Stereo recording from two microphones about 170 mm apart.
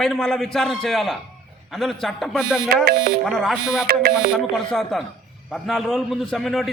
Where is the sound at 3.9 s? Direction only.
60° right (ahead or behind).